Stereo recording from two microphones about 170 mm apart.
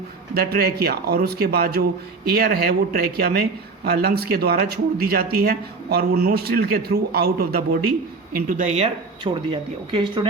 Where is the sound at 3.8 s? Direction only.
70° right (ahead or behind).